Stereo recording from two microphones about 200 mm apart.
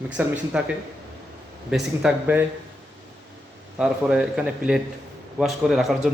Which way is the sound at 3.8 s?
5° right (ahead or behind).